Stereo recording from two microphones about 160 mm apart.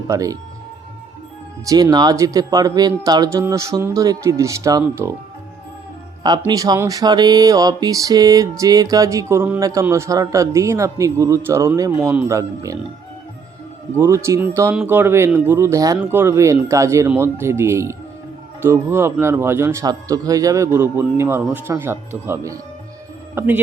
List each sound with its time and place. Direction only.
0.1 s speech: 20° right (ahead or behind)
1.6 s speech: 20° right (ahead or behind)
6.4 s speech: 20° right (ahead or behind)
13.9 s a man's voice: 15° right (ahead or behind)